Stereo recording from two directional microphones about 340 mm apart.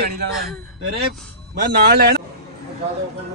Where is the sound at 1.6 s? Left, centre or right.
Right.